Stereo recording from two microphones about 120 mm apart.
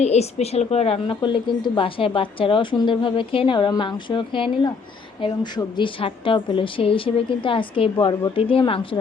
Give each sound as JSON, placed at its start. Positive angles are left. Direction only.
{"t": 0.0, "sound": "a woman's voice", "side_deg": 65}
{"t": 1.2, "sound": "a woman's voice", "side_deg": 40}